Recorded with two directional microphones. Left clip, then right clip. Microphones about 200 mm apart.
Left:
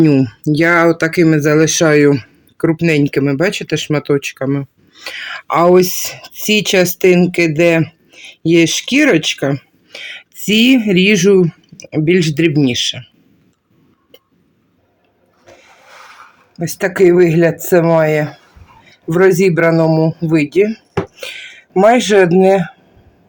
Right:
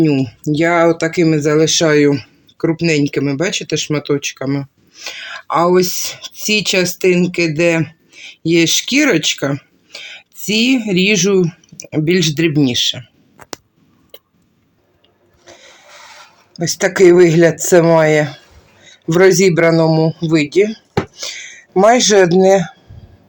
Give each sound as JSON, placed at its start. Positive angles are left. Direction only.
{"t": 0.0, "sound": "speech", "side_deg": 30}
{"t": 15.4, "sound": "a sound", "side_deg": 5}
{"t": 16.6, "sound": "speech", "side_deg": 5}